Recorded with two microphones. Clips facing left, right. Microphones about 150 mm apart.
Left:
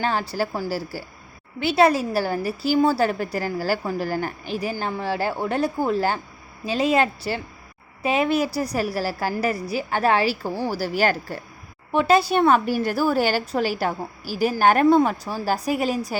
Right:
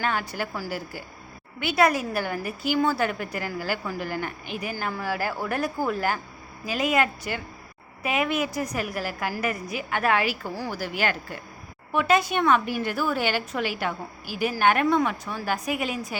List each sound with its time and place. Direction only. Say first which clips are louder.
0.0 s a woman's voice: left 4 dB; 30° left (ahead or behind)